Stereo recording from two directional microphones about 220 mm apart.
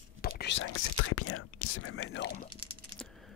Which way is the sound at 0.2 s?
50° left (ahead or behind).